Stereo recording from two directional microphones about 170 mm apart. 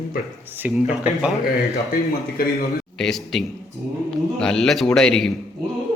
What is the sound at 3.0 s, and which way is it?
A man's voice, centre (ahead or behind).